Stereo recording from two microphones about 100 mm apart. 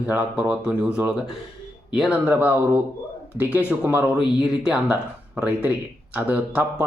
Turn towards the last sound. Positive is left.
turn(degrees=-15)  # may be behind; listen again after turning